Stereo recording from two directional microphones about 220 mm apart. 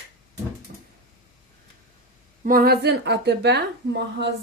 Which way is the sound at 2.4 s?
40° right (ahead or behind).